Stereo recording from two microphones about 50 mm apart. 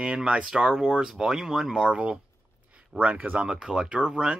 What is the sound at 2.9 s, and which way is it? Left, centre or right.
Speech, right.